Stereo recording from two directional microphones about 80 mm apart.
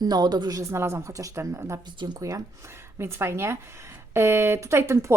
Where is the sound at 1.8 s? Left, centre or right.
Right.